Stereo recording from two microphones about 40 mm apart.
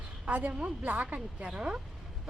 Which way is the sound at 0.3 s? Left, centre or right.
Right.